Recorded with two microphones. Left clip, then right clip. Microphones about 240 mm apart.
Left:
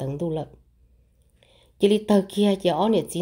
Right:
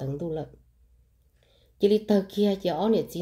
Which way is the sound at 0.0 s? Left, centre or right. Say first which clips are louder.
Left 4 dB; left.